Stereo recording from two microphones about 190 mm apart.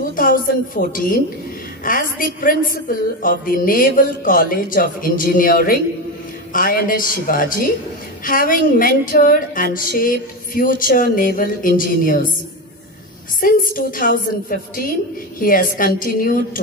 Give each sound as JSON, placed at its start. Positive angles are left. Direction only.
{"t": 0.1, "sound": "a woman's voice", "side_deg": 45}
{"t": 13.6, "sound": "a woman's voice", "side_deg": 45}